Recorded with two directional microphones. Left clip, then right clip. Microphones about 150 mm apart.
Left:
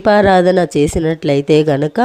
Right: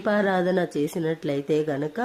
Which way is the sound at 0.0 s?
55° left (ahead or behind).